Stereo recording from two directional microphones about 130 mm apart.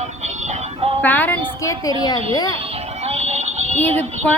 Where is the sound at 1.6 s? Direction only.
25° left (ahead or behind).